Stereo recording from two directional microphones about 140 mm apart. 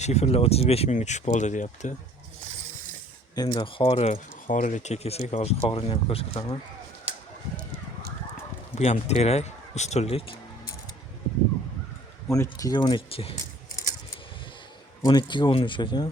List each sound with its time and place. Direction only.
0.0 s speech: 50° left (ahead or behind)
3.3 s speech: 30° left (ahead or behind)
8.7 s speech: 50° left (ahead or behind)
12.3 s speech: 25° left (ahead or behind); by 13.3 s 40° left (ahead or behind)
15.0 s speech: 30° left (ahead or behind)